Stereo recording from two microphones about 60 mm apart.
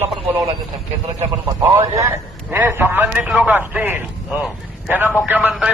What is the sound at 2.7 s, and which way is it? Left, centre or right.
A man's voice, right.